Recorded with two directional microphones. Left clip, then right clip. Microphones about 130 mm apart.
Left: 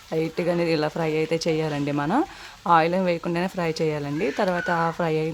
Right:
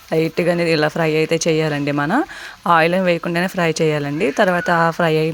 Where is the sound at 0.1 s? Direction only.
25° right (ahead or behind).